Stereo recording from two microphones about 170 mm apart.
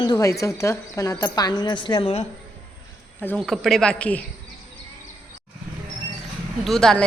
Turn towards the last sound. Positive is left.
turn(degrees=5)  # may be behind; listen again after turning